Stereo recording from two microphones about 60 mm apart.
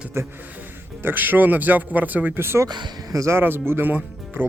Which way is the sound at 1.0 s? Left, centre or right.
Right.